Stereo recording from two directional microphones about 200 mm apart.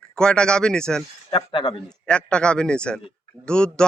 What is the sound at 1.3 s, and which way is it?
Speech, 25° left (ahead or behind).